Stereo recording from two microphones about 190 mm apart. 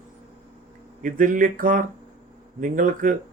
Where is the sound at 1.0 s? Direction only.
45° right (ahead or behind).